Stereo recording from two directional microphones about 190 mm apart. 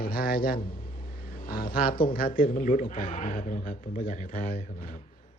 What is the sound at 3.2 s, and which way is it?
Speech, 50° left (ahead or behind).